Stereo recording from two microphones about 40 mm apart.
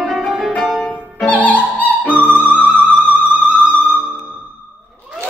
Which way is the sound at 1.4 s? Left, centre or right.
Left.